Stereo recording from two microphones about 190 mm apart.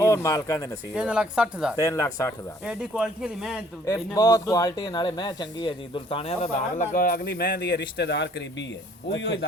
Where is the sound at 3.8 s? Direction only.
15° left (ahead or behind).